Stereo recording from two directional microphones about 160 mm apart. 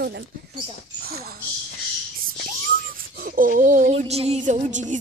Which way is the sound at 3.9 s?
40° right (ahead or behind).